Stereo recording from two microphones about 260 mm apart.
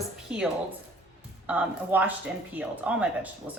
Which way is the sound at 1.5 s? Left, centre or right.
Centre.